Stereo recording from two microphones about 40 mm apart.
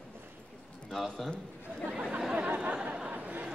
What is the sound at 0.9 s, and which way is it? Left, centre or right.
Speech, centre.